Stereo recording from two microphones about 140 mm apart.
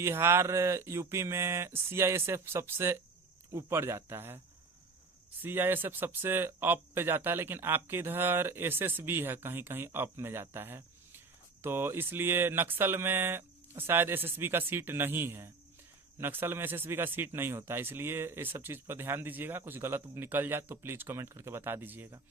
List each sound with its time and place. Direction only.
0.0 s speech: 15° right (ahead or behind)
5.4 s speech: 15° right (ahead or behind)